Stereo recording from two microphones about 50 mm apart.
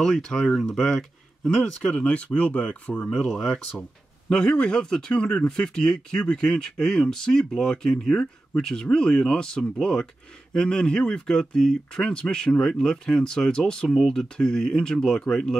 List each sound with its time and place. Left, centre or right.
0.0 s speech: centre